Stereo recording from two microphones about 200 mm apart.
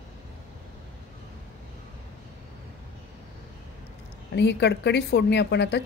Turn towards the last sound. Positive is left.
turn(degrees=60)  # may be behind; listen again after turning